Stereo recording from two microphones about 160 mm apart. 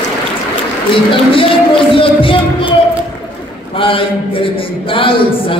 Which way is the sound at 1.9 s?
35° left (ahead or behind).